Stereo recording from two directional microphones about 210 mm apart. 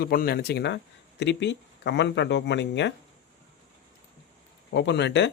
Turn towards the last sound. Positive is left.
turn(degrees=55)  # may be behind; listen again after turning